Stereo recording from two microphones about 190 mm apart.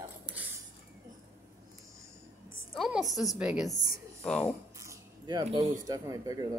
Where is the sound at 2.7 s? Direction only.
Centre (ahead or behind).